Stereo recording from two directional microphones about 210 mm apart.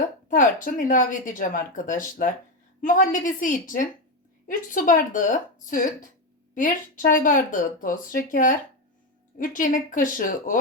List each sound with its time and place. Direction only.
0.3 s speech: 40° left (ahead or behind)